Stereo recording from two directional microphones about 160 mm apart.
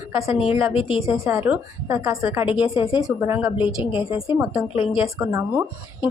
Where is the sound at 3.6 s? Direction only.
30° left (ahead or behind).